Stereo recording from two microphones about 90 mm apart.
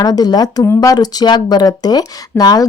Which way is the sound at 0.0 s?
45° left (ahead or behind).